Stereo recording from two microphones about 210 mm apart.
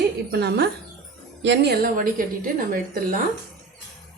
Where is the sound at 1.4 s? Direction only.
55° right (ahead or behind).